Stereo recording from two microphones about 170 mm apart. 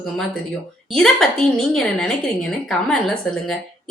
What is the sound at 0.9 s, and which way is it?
A woman's voice, 5° left (ahead or behind).